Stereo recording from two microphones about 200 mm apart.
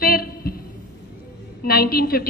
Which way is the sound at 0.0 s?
50° left (ahead or behind).